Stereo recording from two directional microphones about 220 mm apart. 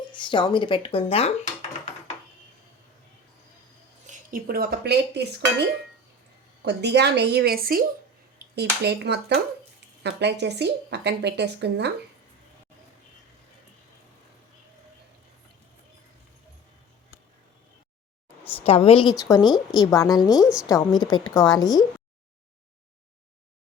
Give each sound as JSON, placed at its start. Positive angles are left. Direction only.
{"t": 0.1, "sound": "speech", "side_deg": 20}
{"t": 4.0, "sound": "speech", "side_deg": -35}
{"t": 6.7, "sound": "speech", "side_deg": -50}
{"t": 18.4, "sound": "a woman's voice", "side_deg": 25}